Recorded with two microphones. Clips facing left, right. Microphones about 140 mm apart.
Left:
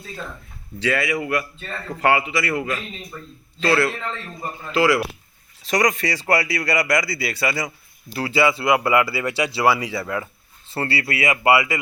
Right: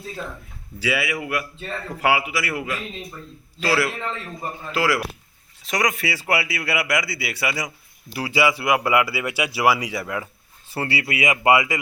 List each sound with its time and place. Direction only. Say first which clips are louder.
0.8 s a man's voice: left 3 dB; 5° right (ahead or behind)